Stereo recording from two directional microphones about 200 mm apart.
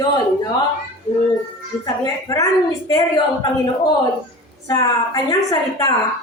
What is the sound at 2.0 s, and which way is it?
Speech, 15° left (ahead or behind).